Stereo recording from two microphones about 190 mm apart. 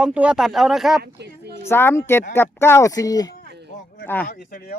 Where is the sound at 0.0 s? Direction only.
5° right (ahead or behind).